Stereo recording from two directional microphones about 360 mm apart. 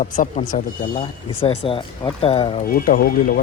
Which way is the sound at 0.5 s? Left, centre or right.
Centre.